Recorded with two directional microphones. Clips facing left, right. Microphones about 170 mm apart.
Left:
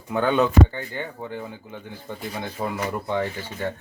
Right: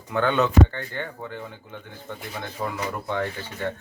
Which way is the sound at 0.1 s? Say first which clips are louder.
Left 1 dB; 10° left (ahead or behind).